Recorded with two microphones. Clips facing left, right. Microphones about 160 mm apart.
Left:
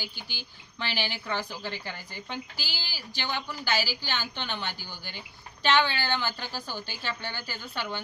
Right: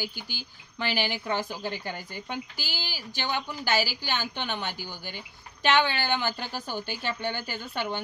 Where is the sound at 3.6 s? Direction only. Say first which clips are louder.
Right 3 dB; 50° right (ahead or behind).